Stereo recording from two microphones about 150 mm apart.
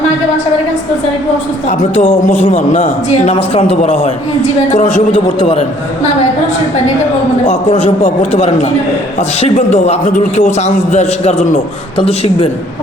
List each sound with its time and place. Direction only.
2.0 s speech: 50° left (ahead or behind)
3.3 s speech: 40° left (ahead or behind)
4.7 s speech: 55° left (ahead or behind)
5.4 s speech: 45° left (ahead or behind)
7.4 s a man's voice: 50° left (ahead or behind)